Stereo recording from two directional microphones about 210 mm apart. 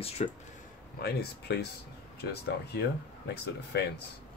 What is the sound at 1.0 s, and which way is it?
Speech, 50° left (ahead or behind).